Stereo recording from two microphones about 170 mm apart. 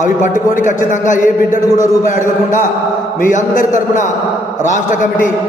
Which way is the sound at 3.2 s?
50° left (ahead or behind).